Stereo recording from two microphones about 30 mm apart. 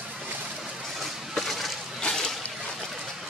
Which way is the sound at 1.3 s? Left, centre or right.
Centre.